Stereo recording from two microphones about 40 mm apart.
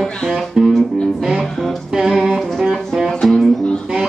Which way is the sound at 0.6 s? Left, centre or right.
Centre.